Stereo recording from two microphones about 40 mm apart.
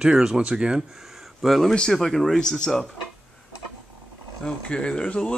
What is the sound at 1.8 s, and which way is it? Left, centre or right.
Speech, centre.